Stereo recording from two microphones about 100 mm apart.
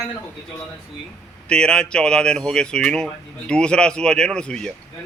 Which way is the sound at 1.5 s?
10° left (ahead or behind).